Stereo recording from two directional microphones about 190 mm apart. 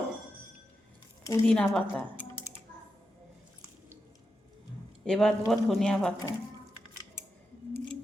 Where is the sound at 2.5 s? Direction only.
15° right (ahead or behind).